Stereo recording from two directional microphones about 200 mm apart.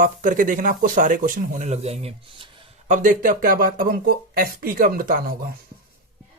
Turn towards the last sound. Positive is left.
turn(degrees=-45)  # may be behind; listen again after turning